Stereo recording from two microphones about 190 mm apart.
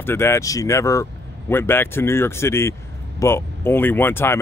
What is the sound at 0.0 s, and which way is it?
Speech, 15° left (ahead or behind).